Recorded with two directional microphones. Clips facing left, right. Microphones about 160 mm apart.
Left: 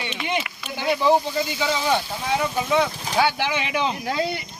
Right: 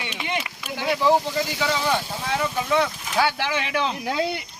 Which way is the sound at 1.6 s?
5° left (ahead or behind).